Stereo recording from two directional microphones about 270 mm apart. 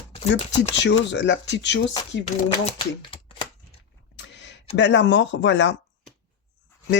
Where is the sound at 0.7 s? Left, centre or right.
Left.